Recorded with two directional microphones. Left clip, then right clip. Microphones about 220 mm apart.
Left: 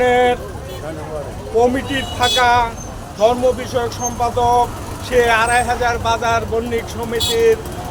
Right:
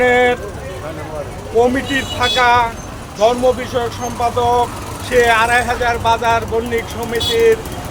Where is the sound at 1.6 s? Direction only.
5° right (ahead or behind).